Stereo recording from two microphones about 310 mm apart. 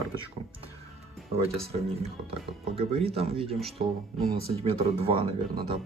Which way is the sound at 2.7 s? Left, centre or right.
Centre.